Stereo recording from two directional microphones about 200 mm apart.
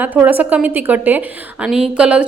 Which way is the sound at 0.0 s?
10° right (ahead or behind).